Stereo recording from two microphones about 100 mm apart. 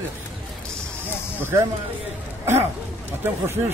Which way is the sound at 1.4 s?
25° right (ahead or behind).